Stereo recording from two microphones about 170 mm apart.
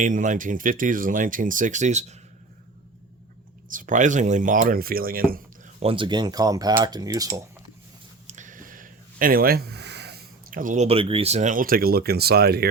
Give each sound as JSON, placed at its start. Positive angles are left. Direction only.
{"t": 0.0, "sound": "speech", "side_deg": -50}
{"t": 3.7, "sound": "speech", "side_deg": -50}
{"t": 5.8, "sound": "speech", "side_deg": -30}
{"t": 8.3, "sound": "a sound", "side_deg": -45}
{"t": 10.8, "sound": "speech", "side_deg": -35}